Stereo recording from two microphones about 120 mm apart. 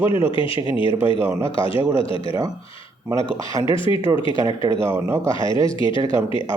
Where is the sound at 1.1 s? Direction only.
20° right (ahead or behind).